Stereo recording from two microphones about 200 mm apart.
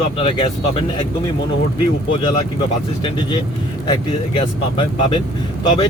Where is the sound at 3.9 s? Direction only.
25° left (ahead or behind).